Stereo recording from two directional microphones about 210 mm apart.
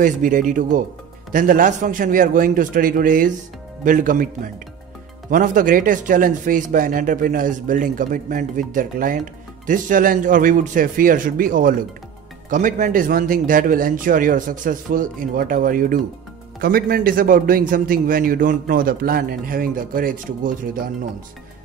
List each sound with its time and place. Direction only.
0.0 s speech: 40° right (ahead or behind)
5.3 s a man's voice: 40° right (ahead or behind)